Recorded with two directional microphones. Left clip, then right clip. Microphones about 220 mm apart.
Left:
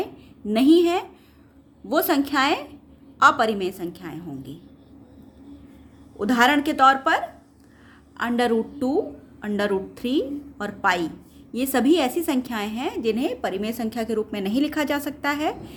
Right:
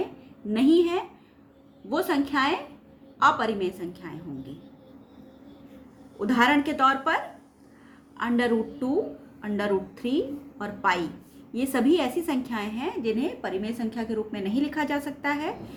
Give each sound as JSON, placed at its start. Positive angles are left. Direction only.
{"t": 0.4, "sound": "a woman's voice", "side_deg": 50}
{"t": 6.1, "sound": "a woman's voice", "side_deg": 50}
{"t": 8.2, "sound": "a woman's voice", "side_deg": 50}